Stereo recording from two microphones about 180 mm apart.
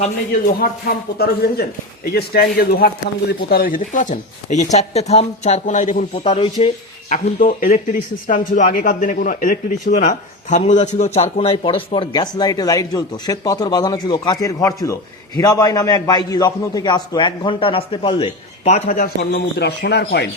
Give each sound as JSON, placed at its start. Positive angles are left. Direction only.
{"t": 0.6, "sound": "speech", "side_deg": 60}
{"t": 6.1, "sound": "speech", "side_deg": 30}
{"t": 7.1, "sound": "a man's voice", "side_deg": 50}
{"t": 18.9, "sound": "speech", "side_deg": 55}